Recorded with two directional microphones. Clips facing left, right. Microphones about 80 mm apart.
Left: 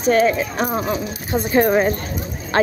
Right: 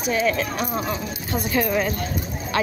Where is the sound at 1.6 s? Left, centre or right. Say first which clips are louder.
Left 7 dB; left.